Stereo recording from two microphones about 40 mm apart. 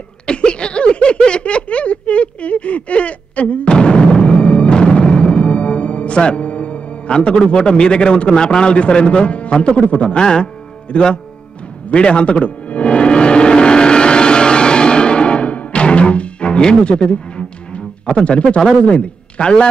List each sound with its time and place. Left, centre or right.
0.3 s a sound: left
3.7 s music: left
8.5 s a man's voice: centre
11.9 s music: left
18.8 s a man's voice: left